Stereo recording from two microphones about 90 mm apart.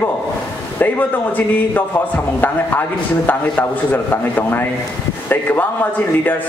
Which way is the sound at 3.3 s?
20° left (ahead or behind).